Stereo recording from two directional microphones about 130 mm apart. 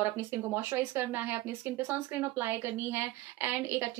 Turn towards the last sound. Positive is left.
turn(degrees=-20)  # may be behind; listen again after turning